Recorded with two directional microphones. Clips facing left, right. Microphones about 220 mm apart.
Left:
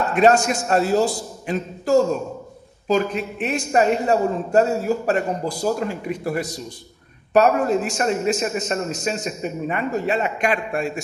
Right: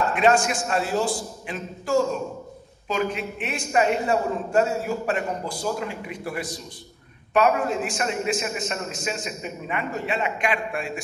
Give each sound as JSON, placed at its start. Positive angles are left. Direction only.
{"t": 0.1, "sound": "a man's voice", "side_deg": 40}